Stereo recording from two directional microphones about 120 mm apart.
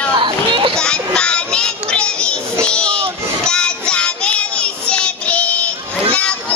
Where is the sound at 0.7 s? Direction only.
5° left (ahead or behind).